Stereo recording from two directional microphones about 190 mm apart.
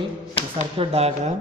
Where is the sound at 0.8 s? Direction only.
30° right (ahead or behind).